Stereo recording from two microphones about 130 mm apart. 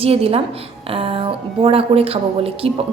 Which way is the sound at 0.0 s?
50° right (ahead or behind).